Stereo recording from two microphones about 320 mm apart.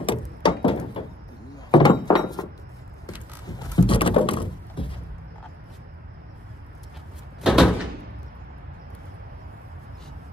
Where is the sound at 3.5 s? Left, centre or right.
Centre.